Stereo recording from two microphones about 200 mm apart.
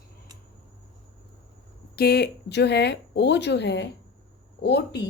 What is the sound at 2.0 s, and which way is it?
Speech, 55° left (ahead or behind).